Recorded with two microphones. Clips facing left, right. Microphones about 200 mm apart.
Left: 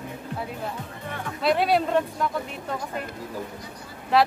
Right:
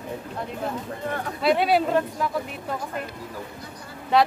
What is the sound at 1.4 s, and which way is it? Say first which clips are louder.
Speech: right 1 dB; centre (ahead or behind).